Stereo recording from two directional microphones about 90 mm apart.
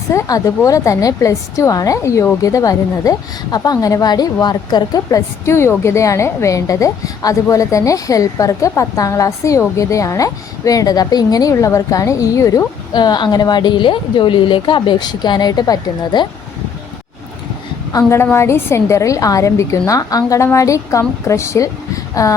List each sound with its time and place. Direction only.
0.1 s a woman's voice: 35° left (ahead or behind)
5.5 s a woman's voice: 30° left (ahead or behind)
12.9 s a woman's voice: 50° left (ahead or behind)
18.1 s a woman's voice: 30° left (ahead or behind)